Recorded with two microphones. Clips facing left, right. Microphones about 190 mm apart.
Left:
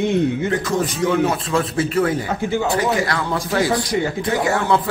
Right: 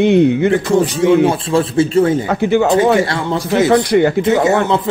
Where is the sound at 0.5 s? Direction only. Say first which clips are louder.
Right 7 dB; 30° right (ahead or behind).